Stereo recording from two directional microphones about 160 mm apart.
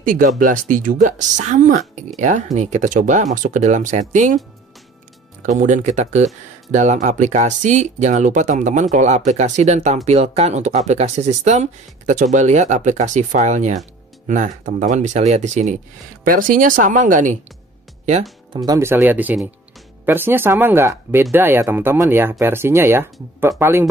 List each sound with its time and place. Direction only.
0.0 s speech: 55° right (ahead or behind)
5.4 s speech: 50° right (ahead or behind)
18.5 s speech: 25° right (ahead or behind)